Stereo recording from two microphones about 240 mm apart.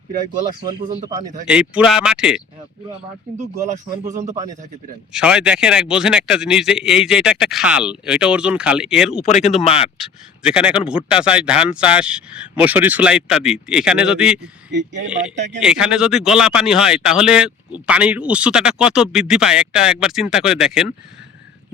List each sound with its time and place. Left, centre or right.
1.5 s a man's voice: centre
4.0 s speech: right
5.1 s a man's voice: centre
9.2 s speech: left
10.4 s a man's voice: centre
14.7 s speech: right
15.6 s a man's voice: centre